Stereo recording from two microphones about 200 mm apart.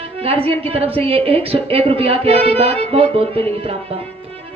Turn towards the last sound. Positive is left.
turn(degrees=-30)  # may be behind; listen again after turning